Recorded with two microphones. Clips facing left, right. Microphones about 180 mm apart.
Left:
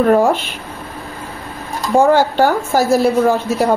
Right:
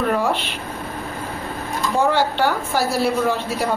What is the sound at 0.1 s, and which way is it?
Speech, 45° left (ahead or behind).